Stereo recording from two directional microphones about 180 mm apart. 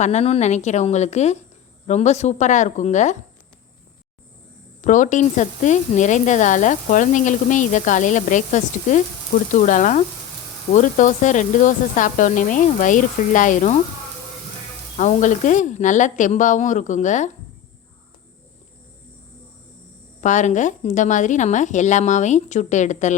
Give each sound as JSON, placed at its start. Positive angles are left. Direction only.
{"t": 0.0, "sound": "a woman's voice", "side_deg": 40}
{"t": 4.8, "sound": "speech", "side_deg": 45}
{"t": 14.9, "sound": "speech", "side_deg": 45}
{"t": 20.2, "sound": "a woman's voice", "side_deg": 45}